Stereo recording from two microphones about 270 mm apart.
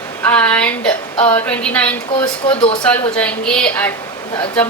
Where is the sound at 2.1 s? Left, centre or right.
Centre.